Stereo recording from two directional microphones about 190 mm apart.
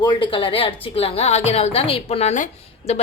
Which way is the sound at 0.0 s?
25° left (ahead or behind).